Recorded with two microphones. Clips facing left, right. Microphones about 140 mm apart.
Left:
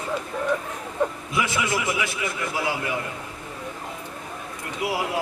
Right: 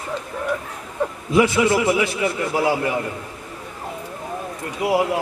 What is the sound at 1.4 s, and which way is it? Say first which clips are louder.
A man's voice: right 9 dB; 35° right (ahead or behind).